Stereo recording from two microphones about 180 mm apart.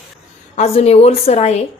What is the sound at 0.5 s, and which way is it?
Speech, 35° left (ahead or behind).